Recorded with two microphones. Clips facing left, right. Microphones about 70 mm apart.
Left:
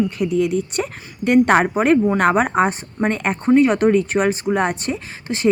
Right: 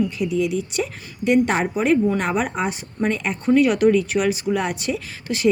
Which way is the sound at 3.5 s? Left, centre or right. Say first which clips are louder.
Left 1 dB; left.